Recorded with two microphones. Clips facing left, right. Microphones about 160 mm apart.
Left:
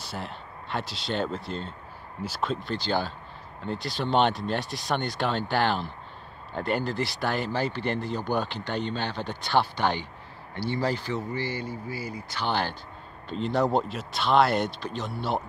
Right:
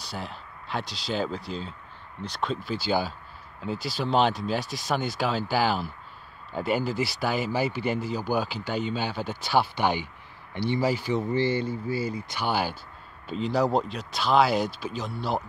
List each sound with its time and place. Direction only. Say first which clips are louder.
0.0 s speech: even; centre (ahead or behind)
11.3 s speech: right 6 dB; 25° right (ahead or behind)
12.4 s speech: even; 10° right (ahead or behind)